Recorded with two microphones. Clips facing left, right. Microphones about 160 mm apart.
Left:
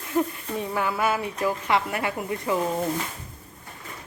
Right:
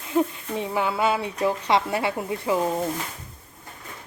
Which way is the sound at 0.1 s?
20° right (ahead or behind).